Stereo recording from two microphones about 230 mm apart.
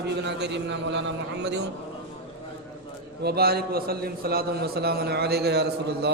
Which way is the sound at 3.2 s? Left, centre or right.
Right.